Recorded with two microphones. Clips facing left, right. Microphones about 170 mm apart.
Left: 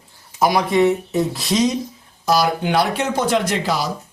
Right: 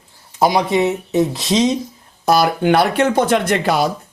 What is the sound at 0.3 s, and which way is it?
Speech, 25° right (ahead or behind).